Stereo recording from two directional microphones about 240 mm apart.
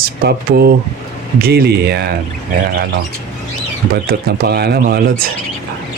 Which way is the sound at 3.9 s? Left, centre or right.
Right.